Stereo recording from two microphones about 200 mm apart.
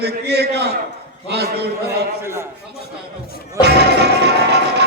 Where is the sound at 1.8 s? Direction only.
10° right (ahead or behind).